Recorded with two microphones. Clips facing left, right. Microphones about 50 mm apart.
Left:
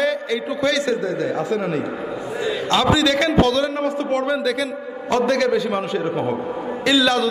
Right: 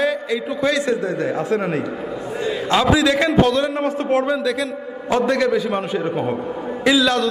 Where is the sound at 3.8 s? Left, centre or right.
Right.